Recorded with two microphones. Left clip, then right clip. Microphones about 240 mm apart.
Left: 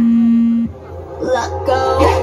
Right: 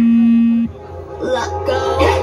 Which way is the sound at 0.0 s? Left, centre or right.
Centre.